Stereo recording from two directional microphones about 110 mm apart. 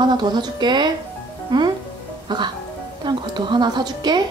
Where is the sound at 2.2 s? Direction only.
45° right (ahead or behind).